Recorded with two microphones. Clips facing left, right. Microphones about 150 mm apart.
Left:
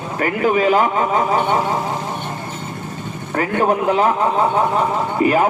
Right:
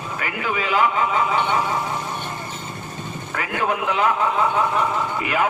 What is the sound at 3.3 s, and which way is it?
A man's voice, 40° left (ahead or behind).